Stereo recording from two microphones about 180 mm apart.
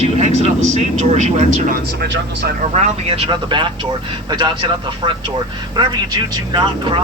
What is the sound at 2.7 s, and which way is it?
Speech, 30° right (ahead or behind).